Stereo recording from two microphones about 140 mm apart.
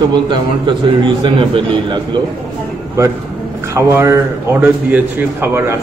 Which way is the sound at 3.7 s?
20° right (ahead or behind).